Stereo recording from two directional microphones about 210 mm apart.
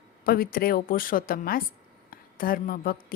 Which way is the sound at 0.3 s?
45° left (ahead or behind).